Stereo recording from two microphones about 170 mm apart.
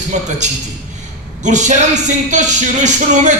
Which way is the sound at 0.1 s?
45° right (ahead or behind).